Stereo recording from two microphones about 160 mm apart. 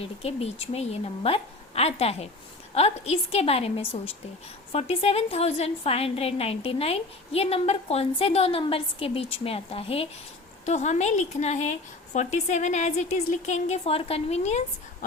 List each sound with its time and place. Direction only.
0.0 s a woman's voice: 40° left (ahead or behind)